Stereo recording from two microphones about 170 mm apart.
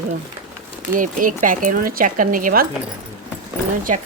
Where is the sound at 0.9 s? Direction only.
50° right (ahead or behind).